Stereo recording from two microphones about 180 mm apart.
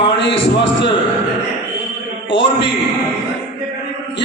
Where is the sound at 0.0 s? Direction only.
80° left.